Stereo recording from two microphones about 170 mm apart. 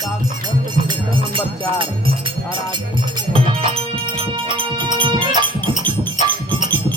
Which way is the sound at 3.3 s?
30° right (ahead or behind).